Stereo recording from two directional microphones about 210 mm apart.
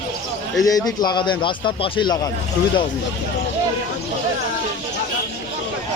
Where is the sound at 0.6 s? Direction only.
15° left (ahead or behind).